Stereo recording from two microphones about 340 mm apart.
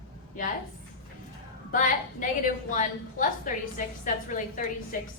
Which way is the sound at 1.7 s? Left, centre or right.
Left.